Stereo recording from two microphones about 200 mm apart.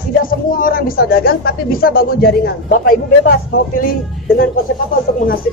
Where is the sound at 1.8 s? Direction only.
50° left (ahead or behind).